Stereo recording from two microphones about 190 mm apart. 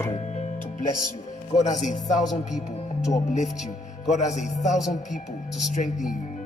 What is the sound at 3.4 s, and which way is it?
Speech, centre (ahead or behind).